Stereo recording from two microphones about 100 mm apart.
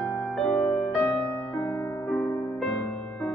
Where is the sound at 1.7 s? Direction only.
30° left (ahead or behind).